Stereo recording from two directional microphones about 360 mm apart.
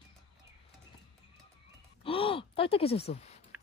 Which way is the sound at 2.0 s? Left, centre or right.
Centre.